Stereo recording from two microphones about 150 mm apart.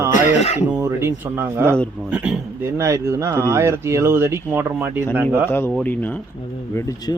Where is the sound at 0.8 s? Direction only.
15° right (ahead or behind).